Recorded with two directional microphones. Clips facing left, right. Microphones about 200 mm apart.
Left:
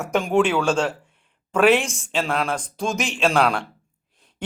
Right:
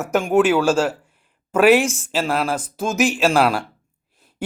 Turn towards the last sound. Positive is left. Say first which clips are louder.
# right 2 dB
turn(degrees=-5)  # may be behind; listen again after turning